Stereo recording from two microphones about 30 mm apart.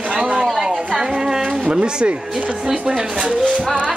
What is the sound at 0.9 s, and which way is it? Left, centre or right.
Speech, right.